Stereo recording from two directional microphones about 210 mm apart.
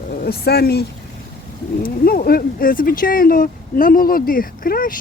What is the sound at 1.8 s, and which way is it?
Speech, 45° left (ahead or behind).